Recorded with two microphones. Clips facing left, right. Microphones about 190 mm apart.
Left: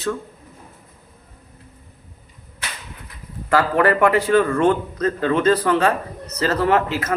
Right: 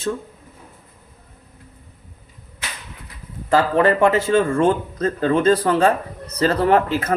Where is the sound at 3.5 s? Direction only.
25° right (ahead or behind).